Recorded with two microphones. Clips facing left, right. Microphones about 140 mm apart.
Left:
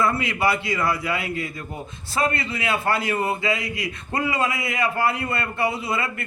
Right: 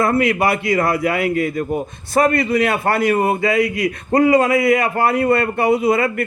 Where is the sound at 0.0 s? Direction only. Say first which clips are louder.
Right 6 dB; 55° right (ahead or behind).